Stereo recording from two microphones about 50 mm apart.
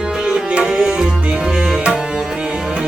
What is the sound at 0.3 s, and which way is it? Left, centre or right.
Music, centre.